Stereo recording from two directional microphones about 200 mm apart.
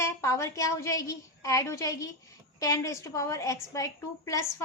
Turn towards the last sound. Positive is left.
turn(degrees=15)  # may be behind; listen again after turning